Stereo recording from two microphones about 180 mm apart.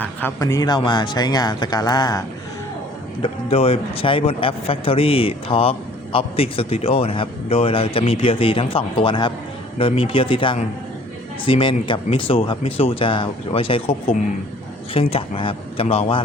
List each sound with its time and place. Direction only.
0.0 s a man's voice: 10° left (ahead or behind); by 13.9 s 30° left (ahead or behind)
15.1 s a man's voice: 30° left (ahead or behind)